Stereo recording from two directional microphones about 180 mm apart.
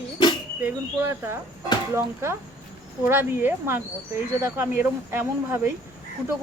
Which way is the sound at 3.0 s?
10° right (ahead or behind).